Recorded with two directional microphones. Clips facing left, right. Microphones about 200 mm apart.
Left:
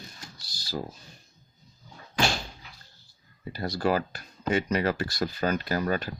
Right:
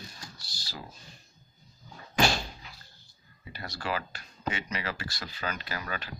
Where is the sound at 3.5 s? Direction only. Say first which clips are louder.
Left 8 dB; 40° left (ahead or behind).